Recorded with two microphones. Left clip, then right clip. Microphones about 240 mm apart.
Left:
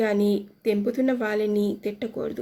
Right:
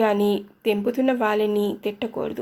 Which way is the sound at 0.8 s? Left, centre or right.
Centre.